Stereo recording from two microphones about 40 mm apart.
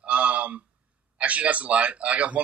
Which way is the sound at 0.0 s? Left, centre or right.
Right.